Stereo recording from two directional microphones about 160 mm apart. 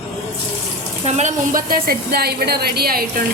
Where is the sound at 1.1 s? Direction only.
45° right (ahead or behind).